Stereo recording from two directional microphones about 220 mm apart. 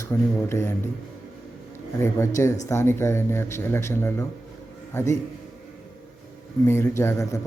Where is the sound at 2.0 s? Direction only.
10° left (ahead or behind).